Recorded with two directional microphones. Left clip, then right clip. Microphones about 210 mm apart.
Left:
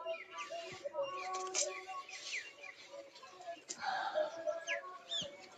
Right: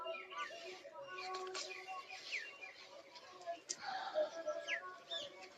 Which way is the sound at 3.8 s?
15° left (ahead or behind).